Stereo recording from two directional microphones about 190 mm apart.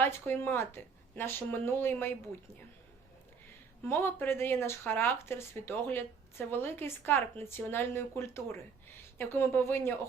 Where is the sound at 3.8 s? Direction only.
10° left (ahead or behind).